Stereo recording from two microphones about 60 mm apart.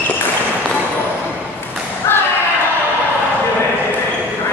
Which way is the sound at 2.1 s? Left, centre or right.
Left.